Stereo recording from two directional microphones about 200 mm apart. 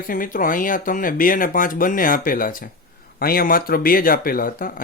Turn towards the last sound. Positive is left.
turn(degrees=45)  # may be behind; listen again after turning